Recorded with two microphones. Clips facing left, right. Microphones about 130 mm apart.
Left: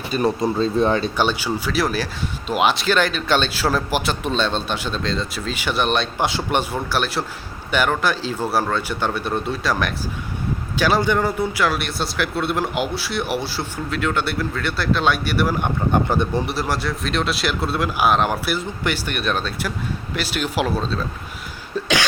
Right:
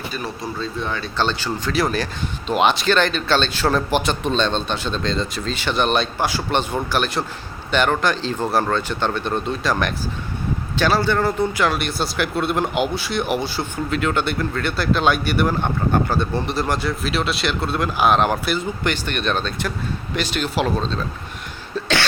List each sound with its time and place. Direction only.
0.4 s speech: 35° left (ahead or behind)
1.0 s speech: 10° left (ahead or behind)
6.1 s a man's voice: 25° left (ahead or behind)
6.5 s speech: 10° left (ahead or behind)
10.8 s speech: 15° left (ahead or behind)
15.5 s speech: 15° left (ahead or behind)